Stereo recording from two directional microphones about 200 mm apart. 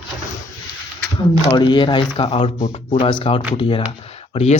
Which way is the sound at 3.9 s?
30° left (ahead or behind).